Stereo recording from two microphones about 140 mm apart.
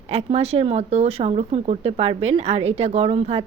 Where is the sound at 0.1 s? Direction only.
45° right (ahead or behind).